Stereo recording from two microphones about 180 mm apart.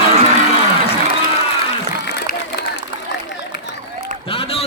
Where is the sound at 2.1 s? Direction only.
65° left (ahead or behind).